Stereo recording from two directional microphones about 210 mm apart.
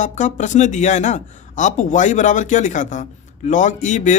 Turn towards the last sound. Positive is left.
turn(degrees=35)  # may be behind; listen again after turning